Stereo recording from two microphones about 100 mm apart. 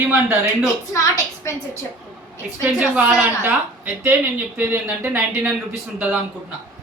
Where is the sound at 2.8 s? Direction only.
10° right (ahead or behind).